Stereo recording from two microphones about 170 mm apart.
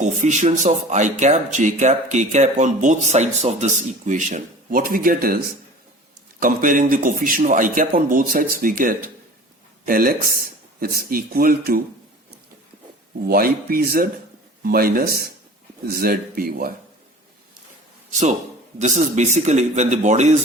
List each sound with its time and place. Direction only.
0.0 s a man's voice: 45° right (ahead or behind); by 11.8 s 60° right (ahead or behind)
13.2 s speech: 60° right (ahead or behind)
18.1 s a man's voice: 45° right (ahead or behind)